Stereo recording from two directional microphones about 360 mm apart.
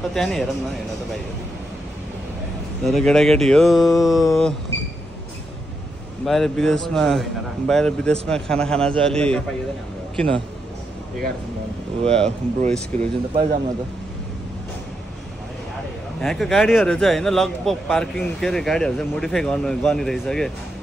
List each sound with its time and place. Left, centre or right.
0.1 s a man's voice: centre
2.9 s a man's voice: centre
6.2 s a man's voice: centre
12.1 s a man's voice: centre
13.3 s a man's voice: right
16.2 s a man's voice: centre